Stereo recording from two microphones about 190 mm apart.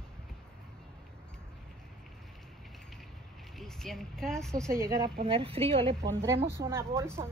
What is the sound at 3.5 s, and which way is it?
Speech, centre (ahead or behind).